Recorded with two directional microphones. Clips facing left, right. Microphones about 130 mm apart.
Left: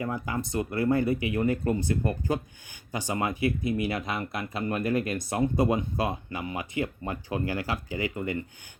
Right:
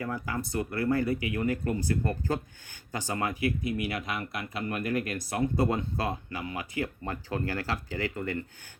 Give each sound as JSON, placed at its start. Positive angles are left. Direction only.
{"t": 0.0, "sound": "speech", "side_deg": 20}